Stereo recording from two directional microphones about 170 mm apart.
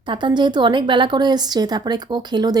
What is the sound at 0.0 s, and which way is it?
A woman's voice, 25° right (ahead or behind).